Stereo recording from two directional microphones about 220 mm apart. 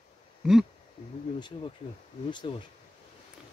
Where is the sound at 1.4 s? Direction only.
20° left (ahead or behind).